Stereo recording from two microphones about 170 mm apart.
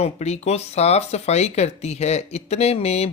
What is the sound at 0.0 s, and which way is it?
Speech, 40° left (ahead or behind).